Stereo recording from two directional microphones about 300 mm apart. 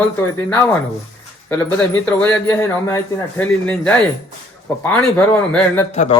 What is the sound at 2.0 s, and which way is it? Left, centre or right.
A man's voice, centre.